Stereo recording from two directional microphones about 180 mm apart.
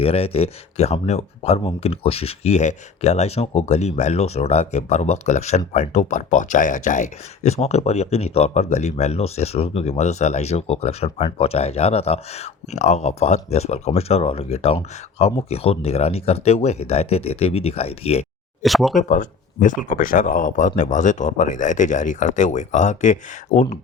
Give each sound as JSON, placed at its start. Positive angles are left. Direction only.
{"t": 0.0, "sound": "speech", "side_deg": 35}
{"t": 18.6, "sound": "speech", "side_deg": 0}
{"t": 18.9, "sound": "speech", "side_deg": 45}